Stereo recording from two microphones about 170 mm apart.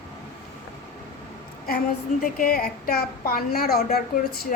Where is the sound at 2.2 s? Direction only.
55° left (ahead or behind).